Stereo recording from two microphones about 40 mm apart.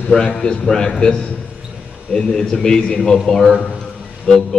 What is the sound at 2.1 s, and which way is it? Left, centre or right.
A man's voice, centre.